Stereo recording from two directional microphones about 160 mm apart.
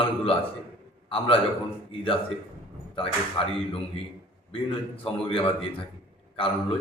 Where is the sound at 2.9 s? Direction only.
35° left (ahead or behind).